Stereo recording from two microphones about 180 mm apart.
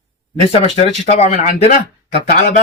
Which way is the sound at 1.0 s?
40° left (ahead or behind).